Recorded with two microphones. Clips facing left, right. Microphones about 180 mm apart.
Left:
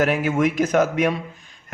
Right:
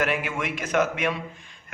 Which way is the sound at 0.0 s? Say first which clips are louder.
Left 8 dB; 40° left (ahead or behind).